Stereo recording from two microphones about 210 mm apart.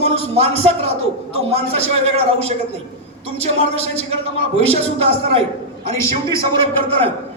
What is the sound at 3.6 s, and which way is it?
A man's voice, 30° right (ahead or behind).